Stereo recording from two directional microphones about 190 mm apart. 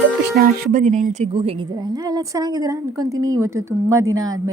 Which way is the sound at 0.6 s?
45° right (ahead or behind).